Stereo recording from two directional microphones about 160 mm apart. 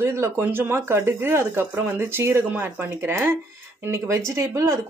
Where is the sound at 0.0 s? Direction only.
15° right (ahead or behind).